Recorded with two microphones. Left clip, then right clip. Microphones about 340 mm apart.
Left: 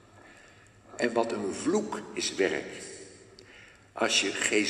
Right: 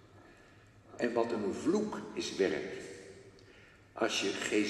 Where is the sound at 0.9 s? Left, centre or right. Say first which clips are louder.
Left 4 dB; left.